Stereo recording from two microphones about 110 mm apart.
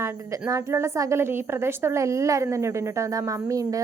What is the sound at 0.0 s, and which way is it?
A woman's voice, 25° right (ahead or behind).